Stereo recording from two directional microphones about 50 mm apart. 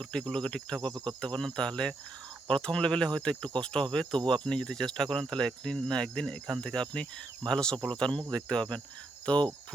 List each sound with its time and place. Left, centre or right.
0.0 s speech: centre
9.3 s cricket: left